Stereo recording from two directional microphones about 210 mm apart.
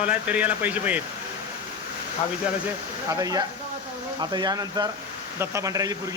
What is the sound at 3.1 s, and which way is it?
Speech, 15° right (ahead or behind).